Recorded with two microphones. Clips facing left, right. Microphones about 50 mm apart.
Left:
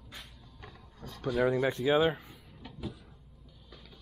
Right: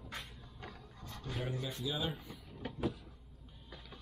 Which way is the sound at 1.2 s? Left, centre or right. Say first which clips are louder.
Left 14 dB; left.